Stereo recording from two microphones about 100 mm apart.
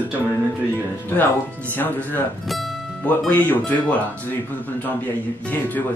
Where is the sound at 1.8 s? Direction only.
20° left (ahead or behind).